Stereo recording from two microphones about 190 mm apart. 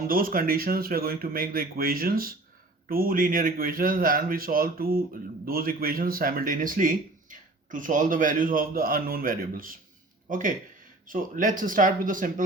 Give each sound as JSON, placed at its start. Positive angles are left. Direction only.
{"t": 0.1, "sound": "speech", "side_deg": -50}